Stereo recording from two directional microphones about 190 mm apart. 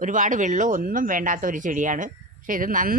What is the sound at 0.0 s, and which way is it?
A woman's voice, 45° right (ahead or behind).